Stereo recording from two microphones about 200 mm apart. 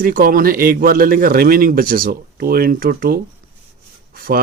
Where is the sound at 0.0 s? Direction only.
45° right (ahead or behind).